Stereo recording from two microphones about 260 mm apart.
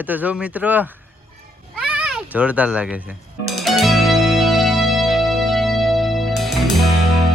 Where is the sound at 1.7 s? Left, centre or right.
Centre.